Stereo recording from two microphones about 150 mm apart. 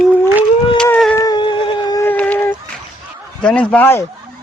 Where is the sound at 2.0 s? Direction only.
10° left (ahead or behind).